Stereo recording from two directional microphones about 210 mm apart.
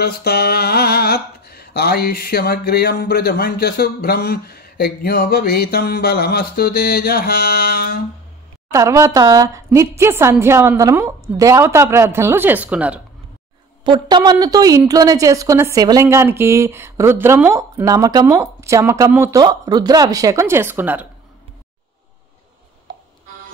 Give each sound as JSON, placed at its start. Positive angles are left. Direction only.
{"t": 0.0, "sound": "a sound", "side_deg": 50}
{"t": 8.7, "sound": "a woman's voice", "side_deg": -15}
{"t": 13.8, "sound": "a woman's voice", "side_deg": -20}